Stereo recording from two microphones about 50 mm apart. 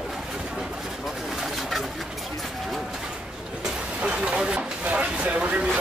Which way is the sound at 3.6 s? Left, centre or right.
Right.